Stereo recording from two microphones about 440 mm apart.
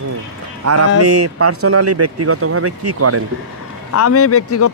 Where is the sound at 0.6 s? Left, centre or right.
Right.